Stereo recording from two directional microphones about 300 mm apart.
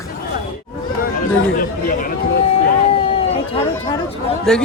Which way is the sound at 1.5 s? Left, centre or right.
Left.